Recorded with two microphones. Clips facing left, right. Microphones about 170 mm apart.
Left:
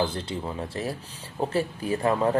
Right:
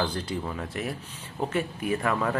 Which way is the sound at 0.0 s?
25° left (ahead or behind).